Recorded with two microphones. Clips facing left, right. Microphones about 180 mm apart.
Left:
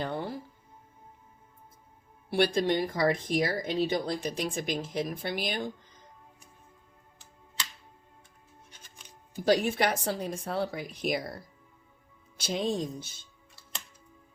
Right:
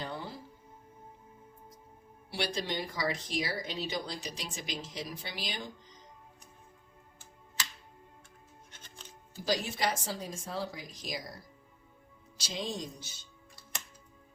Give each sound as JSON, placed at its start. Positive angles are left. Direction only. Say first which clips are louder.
{"t": 0.0, "sound": "music", "louder": "left 7 dB", "side_deg": 55}
{"t": 2.3, "sound": "speech", "louder": "left 9 dB", "side_deg": 55}
{"t": 8.7, "sound": "music", "louder": "right 4 dB", "side_deg": 10}
{"t": 9.4, "sound": "speech", "louder": "left 7 dB", "side_deg": 60}
{"t": 12.4, "sound": "speech", "louder": "left 8 dB", "side_deg": 55}